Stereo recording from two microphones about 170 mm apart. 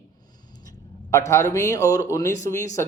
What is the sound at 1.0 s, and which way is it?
A man's voice, 15° left (ahead or behind).